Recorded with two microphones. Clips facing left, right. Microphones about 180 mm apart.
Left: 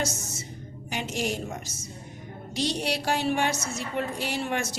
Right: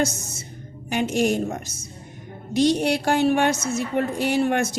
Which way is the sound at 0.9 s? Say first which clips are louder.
Right 9 dB; 55° right (ahead or behind).